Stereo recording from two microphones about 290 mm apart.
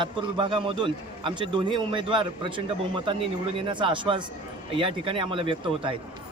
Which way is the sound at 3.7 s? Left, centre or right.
Centre.